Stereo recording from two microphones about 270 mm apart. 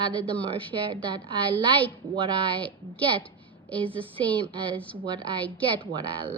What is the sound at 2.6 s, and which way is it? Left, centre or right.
Speech, centre.